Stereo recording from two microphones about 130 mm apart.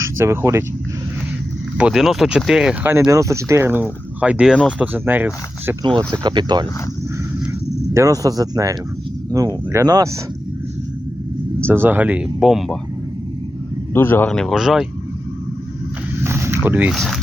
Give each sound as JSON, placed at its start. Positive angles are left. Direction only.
{"t": 0.0, "sound": "speech", "side_deg": -20}
{"t": 1.8, "sound": "speech", "side_deg": -5}
{"t": 3.1, "sound": "speech", "side_deg": -25}
{"t": 6.1, "sound": "speech", "side_deg": -35}
{"t": 7.9, "sound": "speech", "side_deg": -25}
{"t": 11.6, "sound": "speech", "side_deg": -15}
{"t": 13.9, "sound": "speech", "side_deg": 20}
{"t": 14.3, "sound": "speech", "side_deg": 5}
{"t": 16.2, "sound": "a sound", "side_deg": -20}
{"t": 16.9, "sound": "speech", "side_deg": 0}